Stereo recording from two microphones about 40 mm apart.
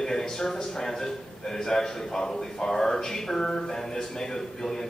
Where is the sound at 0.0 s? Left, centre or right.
Centre.